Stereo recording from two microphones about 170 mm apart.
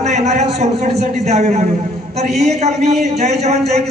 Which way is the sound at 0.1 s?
40° right (ahead or behind).